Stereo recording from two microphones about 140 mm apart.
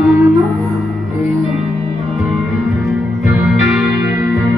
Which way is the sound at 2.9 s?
Centre (ahead or behind).